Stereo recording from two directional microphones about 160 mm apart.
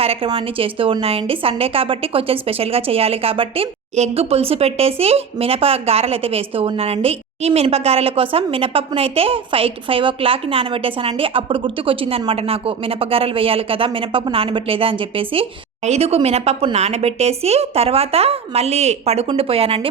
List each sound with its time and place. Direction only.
0.0 s a woman's voice: 35° right (ahead or behind)